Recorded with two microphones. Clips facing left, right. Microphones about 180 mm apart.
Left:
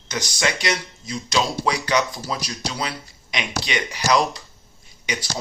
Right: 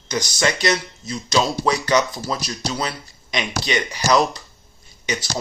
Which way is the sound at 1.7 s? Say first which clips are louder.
Right 3 dB; 10° left (ahead or behind).